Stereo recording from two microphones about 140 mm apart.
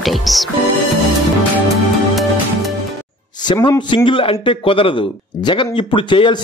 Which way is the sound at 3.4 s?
35° left (ahead or behind).